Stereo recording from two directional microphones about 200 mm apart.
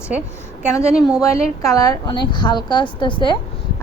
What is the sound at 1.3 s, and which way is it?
A woman's voice, 15° left (ahead or behind).